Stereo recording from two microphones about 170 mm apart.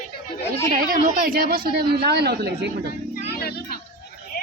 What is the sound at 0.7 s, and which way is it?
A woman's voice, 55° right (ahead or behind).